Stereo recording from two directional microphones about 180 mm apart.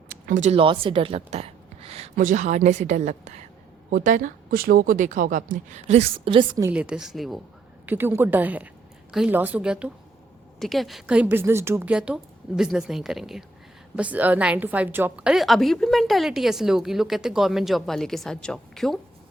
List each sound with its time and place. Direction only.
0.1 s speech: 45° right (ahead or behind)
2.1 s a woman's voice: 45° right (ahead or behind); by 6.7 s 25° right (ahead or behind)
6.7 s a woman's voice: 5° right (ahead or behind)
7.9 s a woman's voice: 10° right (ahead or behind)